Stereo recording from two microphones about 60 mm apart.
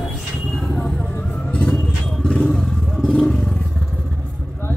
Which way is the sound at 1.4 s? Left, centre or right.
Centre.